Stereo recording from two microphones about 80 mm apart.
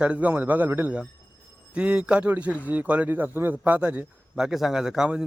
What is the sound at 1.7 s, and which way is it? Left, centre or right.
A man's voice, centre.